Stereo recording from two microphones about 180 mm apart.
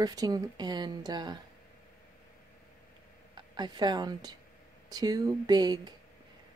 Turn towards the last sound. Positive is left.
turn(degrees=-25)  # may be behind; listen again after turning